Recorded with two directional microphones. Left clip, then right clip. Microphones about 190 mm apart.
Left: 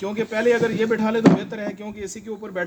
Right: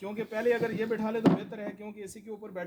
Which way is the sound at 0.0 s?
10° right (ahead or behind).